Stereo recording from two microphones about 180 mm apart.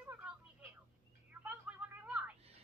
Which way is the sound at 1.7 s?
5° right (ahead or behind).